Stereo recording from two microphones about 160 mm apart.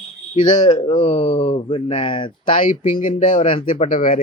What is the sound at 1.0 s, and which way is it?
A man's voice, 40° left (ahead or behind).